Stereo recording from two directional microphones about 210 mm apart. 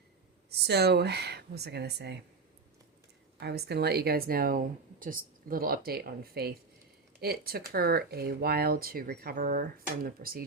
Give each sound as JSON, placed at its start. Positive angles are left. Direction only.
{"t": 0.7, "sound": "speech", "side_deg": -50}
{"t": 3.4, "sound": "speech", "side_deg": -50}